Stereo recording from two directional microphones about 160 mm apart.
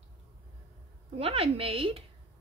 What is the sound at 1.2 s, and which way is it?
Speech, 35° right (ahead or behind).